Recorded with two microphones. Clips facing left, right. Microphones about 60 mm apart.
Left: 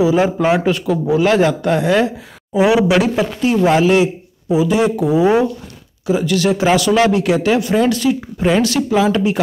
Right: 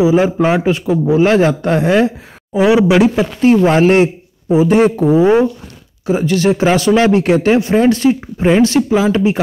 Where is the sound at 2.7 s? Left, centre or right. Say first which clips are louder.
Right 4 dB; centre.